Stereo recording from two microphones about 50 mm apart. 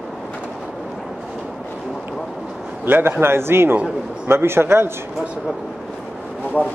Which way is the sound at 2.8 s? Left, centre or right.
Right.